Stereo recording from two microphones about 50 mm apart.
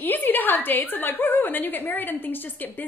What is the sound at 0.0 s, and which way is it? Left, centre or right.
A woman's voice, left.